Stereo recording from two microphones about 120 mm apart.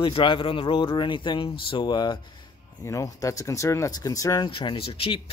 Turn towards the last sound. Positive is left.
turn(degrees=50)  # may be behind; listen again after turning